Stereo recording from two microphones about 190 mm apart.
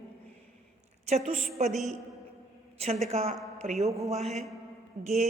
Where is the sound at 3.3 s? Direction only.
Centre (ahead or behind).